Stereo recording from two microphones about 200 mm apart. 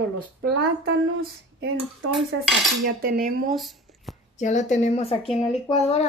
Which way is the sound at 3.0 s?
50° right (ahead or behind).